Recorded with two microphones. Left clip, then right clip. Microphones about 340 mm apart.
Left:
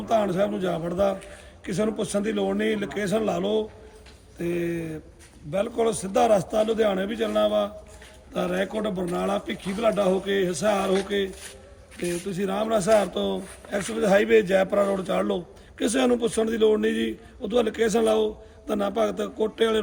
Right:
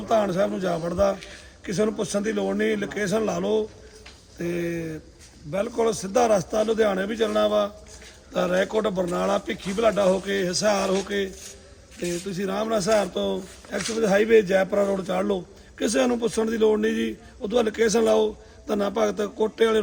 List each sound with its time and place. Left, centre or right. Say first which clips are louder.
0.1 s a man's voice: right 1 dB; centre
12.0 s a man's voice: even; centre